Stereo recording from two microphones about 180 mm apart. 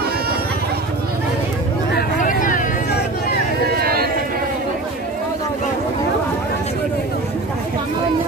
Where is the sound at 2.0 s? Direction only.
50° left (ahead or behind).